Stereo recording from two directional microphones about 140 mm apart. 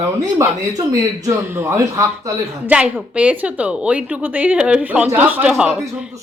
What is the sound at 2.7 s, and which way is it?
A woman's voice, 10° right (ahead or behind).